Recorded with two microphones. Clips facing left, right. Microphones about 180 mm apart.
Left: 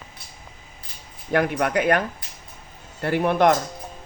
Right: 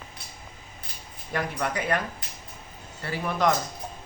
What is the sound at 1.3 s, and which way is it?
Speech, 60° left (ahead or behind).